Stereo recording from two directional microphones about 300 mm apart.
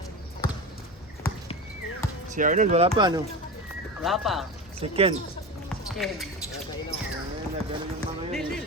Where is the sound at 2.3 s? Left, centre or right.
Right.